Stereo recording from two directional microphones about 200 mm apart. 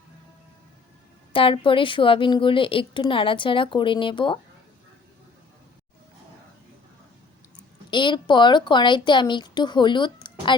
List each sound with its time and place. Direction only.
1.3 s a woman's voice: 25° left (ahead or behind)
7.9 s a woman's voice: 25° left (ahead or behind)